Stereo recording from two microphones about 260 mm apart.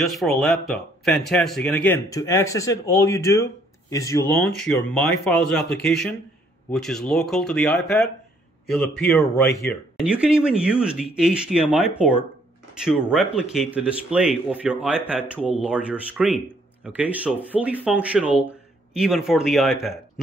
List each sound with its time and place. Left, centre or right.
0.0 s a man's voice: centre
9.5 s speech: left
9.9 s speech: centre